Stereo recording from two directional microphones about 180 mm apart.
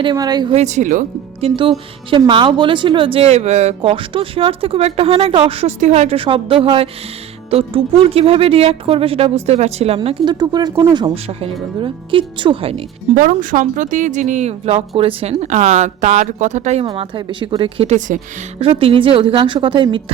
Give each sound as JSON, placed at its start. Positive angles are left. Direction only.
{"t": 0.0, "sound": "a woman's voice", "side_deg": -25}
{"t": 0.5, "sound": "speech", "side_deg": -40}
{"t": 1.4, "sound": "speech", "side_deg": -30}
{"t": 13.1, "sound": "a woman's voice", "side_deg": -50}